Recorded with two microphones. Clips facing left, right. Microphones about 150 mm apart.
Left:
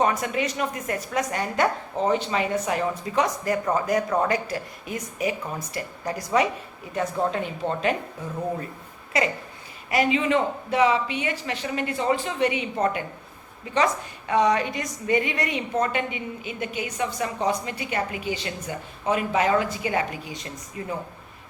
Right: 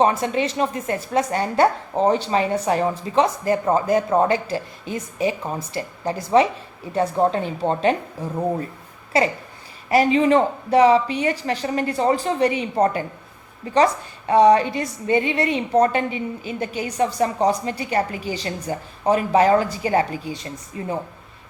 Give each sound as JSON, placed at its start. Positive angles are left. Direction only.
{"t": 0.0, "sound": "a woman's voice", "side_deg": -30}